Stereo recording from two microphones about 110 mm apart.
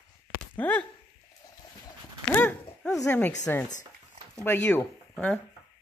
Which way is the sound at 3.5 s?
20° left (ahead or behind).